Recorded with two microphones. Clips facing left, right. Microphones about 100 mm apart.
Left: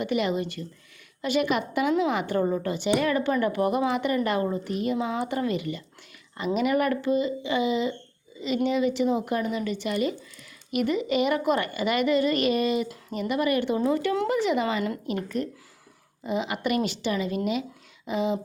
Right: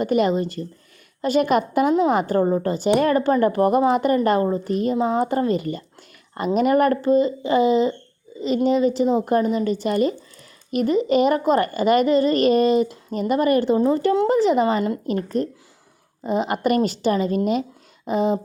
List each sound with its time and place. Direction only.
0.0 s a woman's voice: 40° right (ahead or behind)